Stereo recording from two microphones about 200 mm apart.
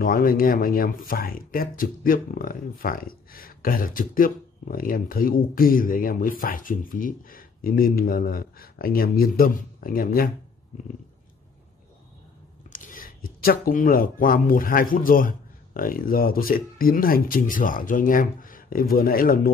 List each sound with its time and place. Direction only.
0.0 s speech: 45° left (ahead or behind)
12.7 s speech: 45° left (ahead or behind)